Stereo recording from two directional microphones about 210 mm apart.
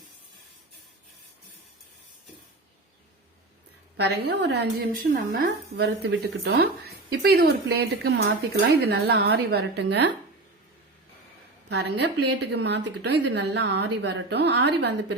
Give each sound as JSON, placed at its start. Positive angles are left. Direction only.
{"t": 3.9, "sound": "a woman's voice", "side_deg": -55}
{"t": 11.7, "sound": "a woman's voice", "side_deg": -55}